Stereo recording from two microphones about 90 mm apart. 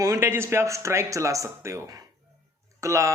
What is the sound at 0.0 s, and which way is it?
Speech, 30° right (ahead or behind).